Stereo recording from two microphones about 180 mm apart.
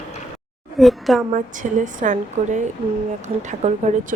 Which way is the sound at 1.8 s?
45° right (ahead or behind).